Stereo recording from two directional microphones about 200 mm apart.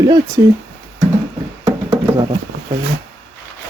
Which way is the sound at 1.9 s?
20° right (ahead or behind).